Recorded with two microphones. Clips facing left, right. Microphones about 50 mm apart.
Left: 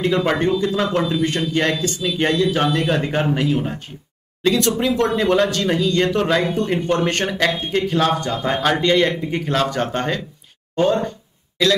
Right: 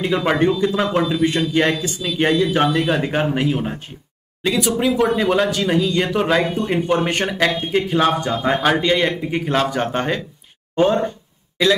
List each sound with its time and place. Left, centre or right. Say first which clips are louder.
0.0 s speech: right 1 dB; centre